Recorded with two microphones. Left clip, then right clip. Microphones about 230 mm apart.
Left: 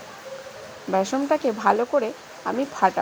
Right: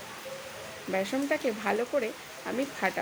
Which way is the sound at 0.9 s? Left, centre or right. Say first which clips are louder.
Left 8 dB; centre.